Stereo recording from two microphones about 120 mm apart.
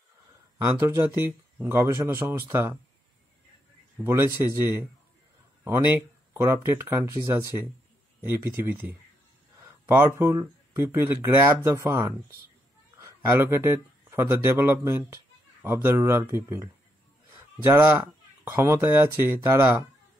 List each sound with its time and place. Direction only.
0.7 s speech: 20° right (ahead or behind)
4.0 s speech: 20° right (ahead or behind)
6.3 s speech: 20° right (ahead or behind)
13.0 s speech: 20° right (ahead or behind)